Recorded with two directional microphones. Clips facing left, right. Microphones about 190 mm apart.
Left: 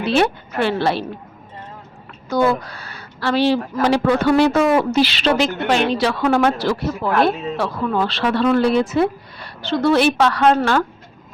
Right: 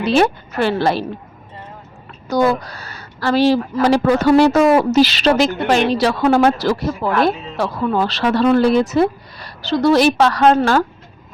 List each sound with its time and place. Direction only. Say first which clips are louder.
0.0 s a woman's voice: right 2 dB; 40° right (ahead or behind)
2.3 s a woman's voice: right 2 dB; 40° right (ahead or behind)